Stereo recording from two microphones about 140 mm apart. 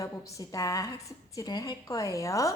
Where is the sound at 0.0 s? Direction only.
25° left (ahead or behind).